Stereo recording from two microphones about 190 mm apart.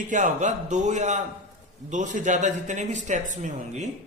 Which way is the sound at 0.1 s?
40° right (ahead or behind).